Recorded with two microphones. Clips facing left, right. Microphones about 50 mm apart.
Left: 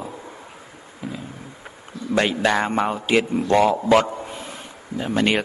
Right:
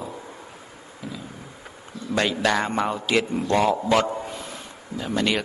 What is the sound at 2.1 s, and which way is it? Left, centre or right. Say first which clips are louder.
Speech: left 3 dB; left.